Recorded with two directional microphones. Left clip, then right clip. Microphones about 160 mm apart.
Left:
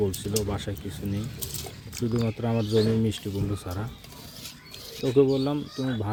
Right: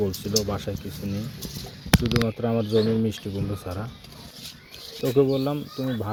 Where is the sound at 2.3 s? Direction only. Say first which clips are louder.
Right 3 dB; 10° left (ahead or behind).